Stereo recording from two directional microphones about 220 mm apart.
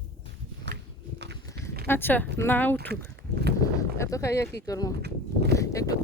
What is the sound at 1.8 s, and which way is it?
Speech, 10° left (ahead or behind).